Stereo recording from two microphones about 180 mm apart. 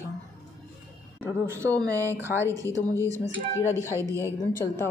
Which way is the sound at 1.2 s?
15° right (ahead or behind).